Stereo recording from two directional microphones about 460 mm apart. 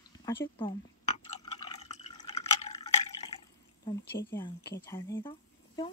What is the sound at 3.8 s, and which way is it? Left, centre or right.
Speech, centre.